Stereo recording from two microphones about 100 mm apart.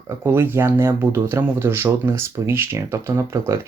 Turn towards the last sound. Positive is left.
turn(degrees=-30)  # may be behind; listen again after turning